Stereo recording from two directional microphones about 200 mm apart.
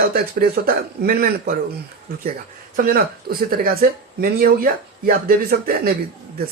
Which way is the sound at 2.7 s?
45° right (ahead or behind).